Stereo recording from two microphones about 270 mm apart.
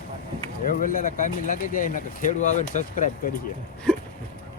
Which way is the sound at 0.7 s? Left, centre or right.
Left.